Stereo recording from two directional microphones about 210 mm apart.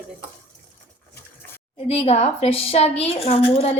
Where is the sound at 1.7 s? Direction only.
30° left (ahead or behind).